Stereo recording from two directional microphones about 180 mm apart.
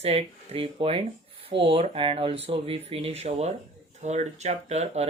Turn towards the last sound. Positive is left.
turn(degrees=-35)  # may be behind; listen again after turning